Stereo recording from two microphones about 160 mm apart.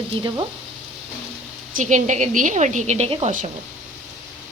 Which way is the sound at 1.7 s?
50° right (ahead or behind).